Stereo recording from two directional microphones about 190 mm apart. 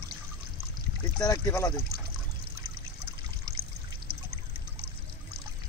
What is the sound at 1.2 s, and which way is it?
Speech, 20° left (ahead or behind).